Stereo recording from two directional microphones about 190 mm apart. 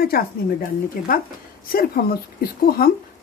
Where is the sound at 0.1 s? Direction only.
50° left (ahead or behind).